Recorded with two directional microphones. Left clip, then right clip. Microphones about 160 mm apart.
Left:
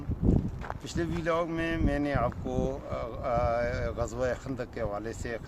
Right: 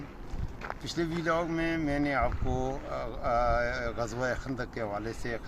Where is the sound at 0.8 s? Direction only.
35° left (ahead or behind).